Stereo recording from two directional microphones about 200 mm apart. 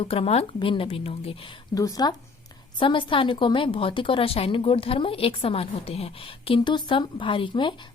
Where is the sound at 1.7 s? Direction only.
20° left (ahead or behind).